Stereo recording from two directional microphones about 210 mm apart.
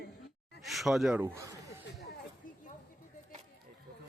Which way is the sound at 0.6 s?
Centre (ahead or behind).